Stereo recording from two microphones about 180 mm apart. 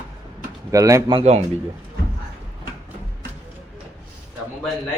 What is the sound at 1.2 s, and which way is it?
Speech, 35° right (ahead or behind).